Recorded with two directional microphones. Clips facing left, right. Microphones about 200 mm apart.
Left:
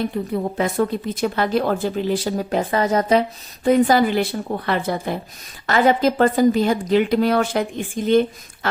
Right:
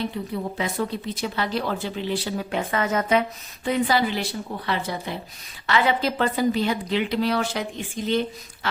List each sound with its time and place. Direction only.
0.0 s a woman's voice: 50° left (ahead or behind)